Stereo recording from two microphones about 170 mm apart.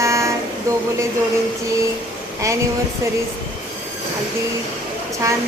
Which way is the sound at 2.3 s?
20° right (ahead or behind).